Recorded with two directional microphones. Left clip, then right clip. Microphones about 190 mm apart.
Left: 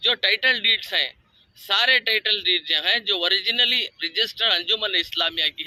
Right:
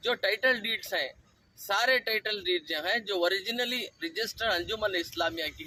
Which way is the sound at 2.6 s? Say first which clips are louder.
Left 9 dB; 20° right (ahead or behind).